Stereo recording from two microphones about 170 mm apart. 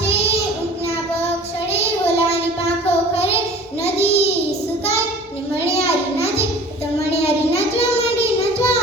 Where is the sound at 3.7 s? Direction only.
40° left (ahead or behind).